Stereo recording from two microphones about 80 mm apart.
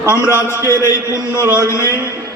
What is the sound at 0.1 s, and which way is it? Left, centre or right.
A man's voice, left.